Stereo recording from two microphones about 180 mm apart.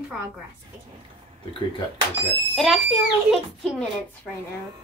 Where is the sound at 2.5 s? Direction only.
Centre (ahead or behind).